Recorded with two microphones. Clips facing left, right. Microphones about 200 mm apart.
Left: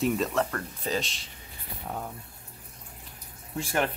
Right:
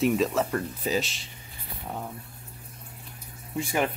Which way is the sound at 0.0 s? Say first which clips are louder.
Right 3 dB; centre (ahead or behind).